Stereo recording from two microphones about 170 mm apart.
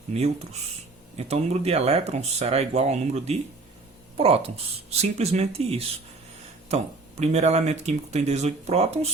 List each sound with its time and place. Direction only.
0.1 s speech: 40° right (ahead or behind)